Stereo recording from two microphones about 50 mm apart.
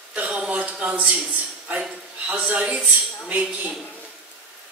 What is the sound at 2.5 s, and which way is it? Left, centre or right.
A man's voice, right.